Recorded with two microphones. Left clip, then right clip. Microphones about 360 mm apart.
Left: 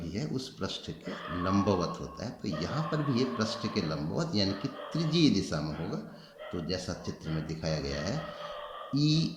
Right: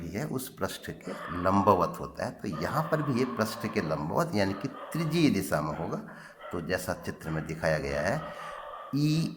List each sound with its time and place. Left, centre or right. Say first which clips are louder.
0.1 s speech: right 3 dB; centre
6.7 s speech: right 6 dB; centre